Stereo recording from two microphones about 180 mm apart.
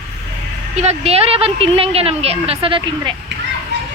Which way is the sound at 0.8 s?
35° right (ahead or behind).